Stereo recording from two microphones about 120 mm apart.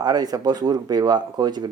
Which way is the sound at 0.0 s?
35° right (ahead or behind).